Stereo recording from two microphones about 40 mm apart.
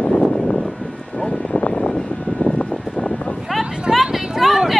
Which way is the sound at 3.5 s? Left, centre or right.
Centre.